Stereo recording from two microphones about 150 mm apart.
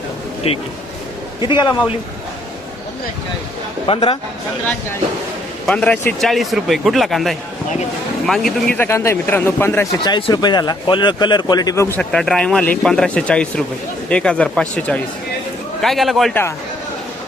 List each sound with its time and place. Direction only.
0.4 s a man's voice: 40° left (ahead or behind)
1.4 s a man's voice: 30° left (ahead or behind)
3.8 s a man's voice: 35° left (ahead or behind)
5.6 s speech: 5° left (ahead or behind)
10.0 s speech: 30° left (ahead or behind)
11.9 s speech: 5° left (ahead or behind)